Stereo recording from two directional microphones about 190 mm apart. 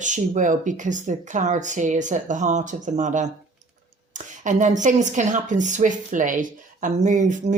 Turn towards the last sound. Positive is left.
turn(degrees=-40)  # may be behind; listen again after turning